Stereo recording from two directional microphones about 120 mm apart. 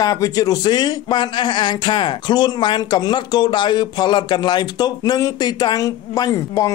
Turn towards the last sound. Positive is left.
turn(degrees=30)  # may be behind; listen again after turning